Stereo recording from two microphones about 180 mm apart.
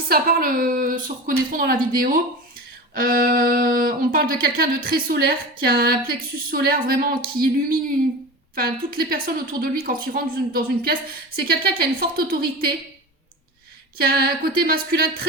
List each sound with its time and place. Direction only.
0.1 s speech: 55° right (ahead or behind)
14.0 s speech: 55° right (ahead or behind)